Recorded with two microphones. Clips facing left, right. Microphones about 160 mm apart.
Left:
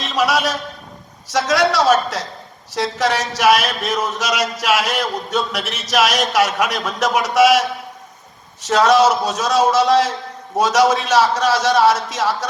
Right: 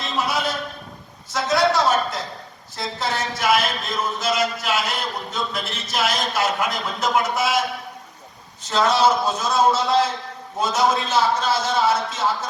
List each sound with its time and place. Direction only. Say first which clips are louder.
0.0 s a sound: left 6 dB; 90° left
1.3 s speech: left 3 dB; 90° left
8.6 s speech: left 5 dB; 90° left